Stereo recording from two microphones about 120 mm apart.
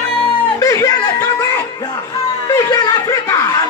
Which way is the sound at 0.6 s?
30° left (ahead or behind).